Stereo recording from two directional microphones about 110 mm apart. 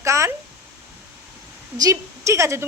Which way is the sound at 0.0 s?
25° right (ahead or behind).